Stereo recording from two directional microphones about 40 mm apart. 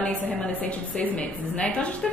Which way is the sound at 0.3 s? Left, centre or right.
Left.